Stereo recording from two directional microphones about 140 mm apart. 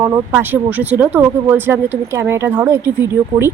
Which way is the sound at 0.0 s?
20° right (ahead or behind).